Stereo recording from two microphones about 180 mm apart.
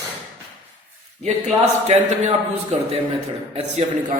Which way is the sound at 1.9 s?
40° right (ahead or behind).